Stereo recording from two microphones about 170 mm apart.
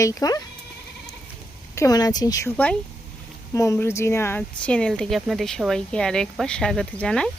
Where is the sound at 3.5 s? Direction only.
20° left (ahead or behind).